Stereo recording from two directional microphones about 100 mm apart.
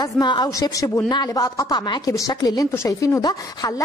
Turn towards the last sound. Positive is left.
turn(degrees=35)  # may be behind; listen again after turning